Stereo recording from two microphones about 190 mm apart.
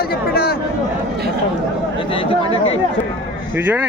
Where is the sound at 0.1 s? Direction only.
55° left (ahead or behind).